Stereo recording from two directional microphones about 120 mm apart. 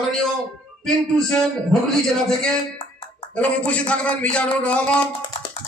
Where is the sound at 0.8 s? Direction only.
5° left (ahead or behind).